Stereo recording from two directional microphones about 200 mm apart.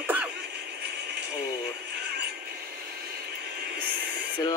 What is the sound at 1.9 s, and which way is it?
Synthetic singing, 55° right (ahead or behind).